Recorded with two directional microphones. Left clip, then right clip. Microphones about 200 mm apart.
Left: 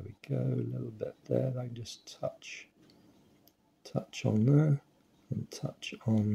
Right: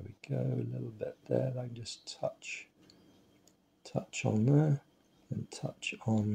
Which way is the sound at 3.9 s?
20° left (ahead or behind).